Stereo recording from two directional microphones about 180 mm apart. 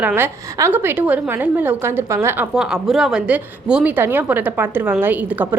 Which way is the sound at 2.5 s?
Centre (ahead or behind).